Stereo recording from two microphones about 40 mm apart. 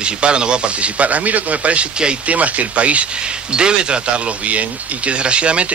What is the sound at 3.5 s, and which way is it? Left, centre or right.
Speech, right.